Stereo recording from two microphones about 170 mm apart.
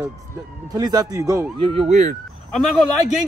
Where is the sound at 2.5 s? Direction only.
Centre (ahead or behind).